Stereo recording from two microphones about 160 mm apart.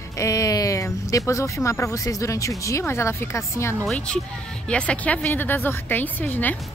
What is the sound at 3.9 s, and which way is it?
Speech, 5° left (ahead or behind).